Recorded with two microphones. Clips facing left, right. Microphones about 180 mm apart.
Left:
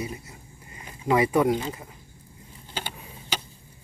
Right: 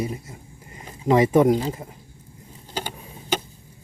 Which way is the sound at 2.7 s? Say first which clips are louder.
Right 5 dB; 45° right (ahead or behind).